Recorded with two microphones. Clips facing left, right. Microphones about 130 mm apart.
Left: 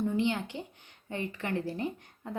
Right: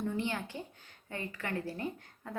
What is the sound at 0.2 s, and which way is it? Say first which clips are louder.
Speech: left 5 dB; 20° left (ahead or behind).